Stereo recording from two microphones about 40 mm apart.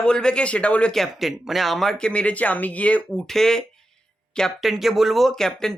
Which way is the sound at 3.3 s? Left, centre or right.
Centre.